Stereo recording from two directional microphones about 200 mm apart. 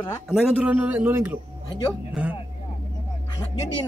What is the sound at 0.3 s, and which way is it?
A man's voice, 5° right (ahead or behind).